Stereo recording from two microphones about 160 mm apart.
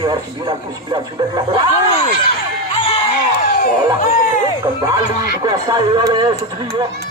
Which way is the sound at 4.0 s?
60° left (ahead or behind).